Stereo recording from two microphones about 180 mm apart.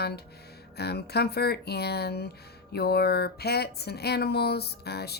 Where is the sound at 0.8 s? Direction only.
65° left (ahead or behind).